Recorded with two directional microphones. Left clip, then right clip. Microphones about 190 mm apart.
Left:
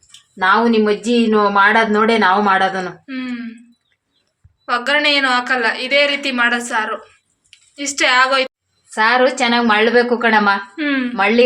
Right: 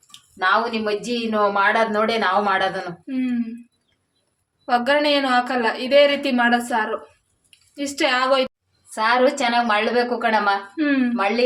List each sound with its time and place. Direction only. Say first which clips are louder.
0.3 s speech: left 6 dB; 45° left (ahead or behind)
3.1 s a woman's voice: right 1 dB; 20° right (ahead or behind)
4.6 s a woman's voice: left 3 dB; 25° right (ahead or behind)
9.0 s speech: left 4 dB; 40° left (ahead or behind)
10.8 s a woman's voice: left 2 dB; 25° right (ahead or behind)